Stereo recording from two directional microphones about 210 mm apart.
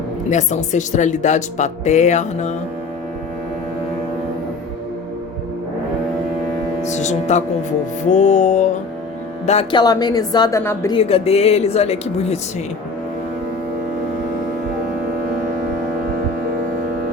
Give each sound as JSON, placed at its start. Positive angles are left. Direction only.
{"t": 0.3, "sound": "speech", "side_deg": 35}
{"t": 6.8, "sound": "speech", "side_deg": 35}
{"t": 9.5, "sound": "speech", "side_deg": 25}
{"t": 10.9, "sound": "speech", "side_deg": 30}